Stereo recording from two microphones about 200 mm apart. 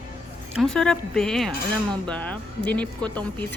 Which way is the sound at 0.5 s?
5° left (ahead or behind).